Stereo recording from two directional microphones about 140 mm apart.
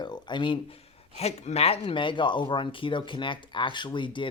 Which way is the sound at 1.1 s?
50° left (ahead or behind).